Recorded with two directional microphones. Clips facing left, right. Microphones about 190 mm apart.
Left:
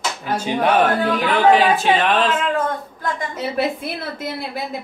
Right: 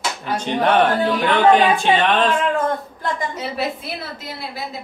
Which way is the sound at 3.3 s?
50° left (ahead or behind).